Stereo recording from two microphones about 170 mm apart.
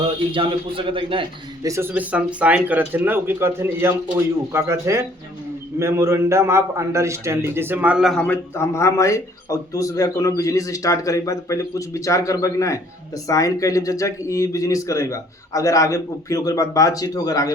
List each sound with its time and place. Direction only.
0.0 s a man's voice: 30° right (ahead or behind)
1.6 s a man's voice: 15° right (ahead or behind); by 17.5 s 20° left (ahead or behind)